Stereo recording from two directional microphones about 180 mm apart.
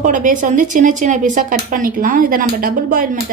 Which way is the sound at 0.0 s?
45° right (ahead or behind).